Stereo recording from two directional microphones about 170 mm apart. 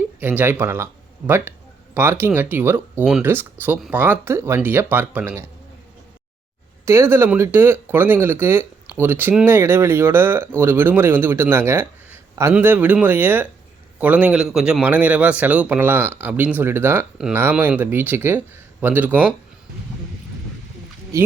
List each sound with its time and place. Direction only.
0.2 s a man's voice: 10° right (ahead or behind)
6.8 s a man's voice: 15° right (ahead or behind)
21.1 s a man's voice: 15° right (ahead or behind)